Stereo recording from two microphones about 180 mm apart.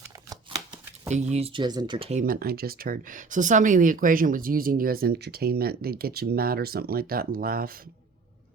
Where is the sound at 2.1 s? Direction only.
50° right (ahead or behind).